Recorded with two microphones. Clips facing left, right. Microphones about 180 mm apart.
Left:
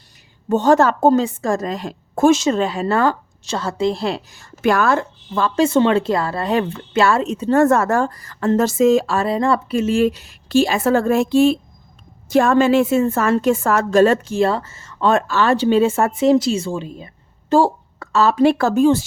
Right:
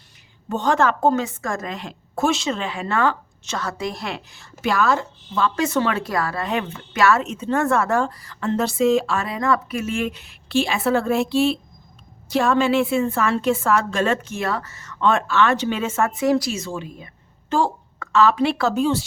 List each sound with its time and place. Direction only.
0.4 s speech: 40° left (ahead or behind)
5.5 s a woman's voice: 25° left (ahead or behind); by 19.0 s 45° left (ahead or behind)